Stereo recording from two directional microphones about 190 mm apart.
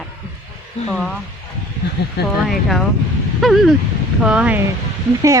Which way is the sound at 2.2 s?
60° left (ahead or behind).